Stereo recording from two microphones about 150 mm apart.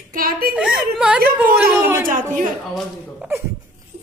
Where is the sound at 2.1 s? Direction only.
65° right (ahead or behind).